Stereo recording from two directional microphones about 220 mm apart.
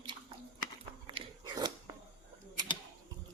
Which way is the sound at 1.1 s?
20° right (ahead or behind).